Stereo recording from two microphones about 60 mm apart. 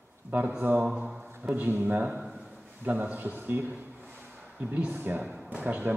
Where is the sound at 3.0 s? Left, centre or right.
Right.